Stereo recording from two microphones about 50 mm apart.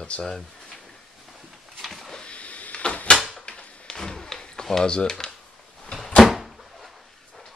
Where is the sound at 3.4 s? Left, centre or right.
Centre.